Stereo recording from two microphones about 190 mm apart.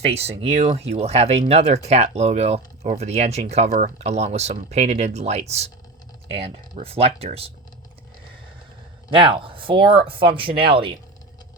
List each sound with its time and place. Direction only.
0.0 s speech: 35° right (ahead or behind)
9.1 s speech: 25° right (ahead or behind)